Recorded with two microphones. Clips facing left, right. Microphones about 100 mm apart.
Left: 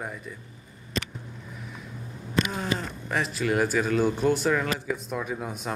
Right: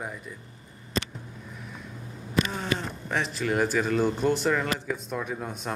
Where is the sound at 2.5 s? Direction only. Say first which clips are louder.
Even; centre (ahead or behind).